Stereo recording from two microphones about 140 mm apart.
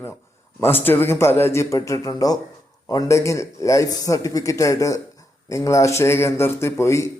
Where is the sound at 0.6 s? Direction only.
15° left (ahead or behind).